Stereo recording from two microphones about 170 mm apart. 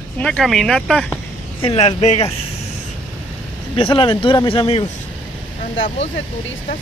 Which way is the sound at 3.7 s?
30° left (ahead or behind).